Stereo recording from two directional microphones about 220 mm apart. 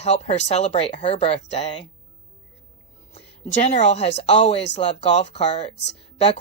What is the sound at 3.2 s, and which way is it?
A woman's voice, 30° left (ahead or behind).